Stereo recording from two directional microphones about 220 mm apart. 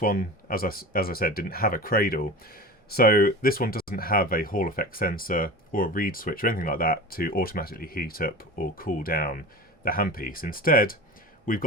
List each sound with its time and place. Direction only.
0.0 s speech: 40° left (ahead or behind)